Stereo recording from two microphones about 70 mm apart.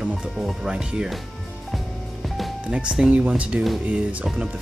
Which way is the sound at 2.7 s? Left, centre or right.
Centre.